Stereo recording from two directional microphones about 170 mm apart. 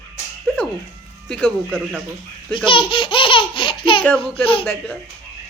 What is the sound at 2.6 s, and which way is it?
Speech, 30° left (ahead or behind).